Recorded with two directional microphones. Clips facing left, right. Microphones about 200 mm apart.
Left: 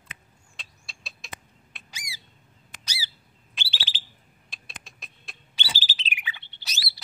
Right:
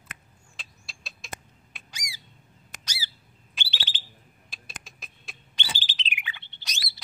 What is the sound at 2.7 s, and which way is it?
Squawk, 45° right (ahead or behind).